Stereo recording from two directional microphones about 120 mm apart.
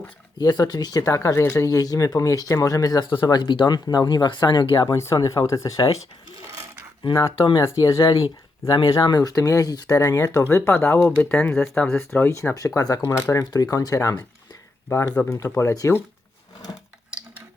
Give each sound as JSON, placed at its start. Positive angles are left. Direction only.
{"t": 0.3, "sound": "speech", "side_deg": 35}
{"t": 4.8, "sound": "speech", "side_deg": 25}
{"t": 7.1, "sound": "speech", "side_deg": 25}
{"t": 8.7, "sound": "speech", "side_deg": 40}
{"t": 12.4, "sound": "speech", "side_deg": 25}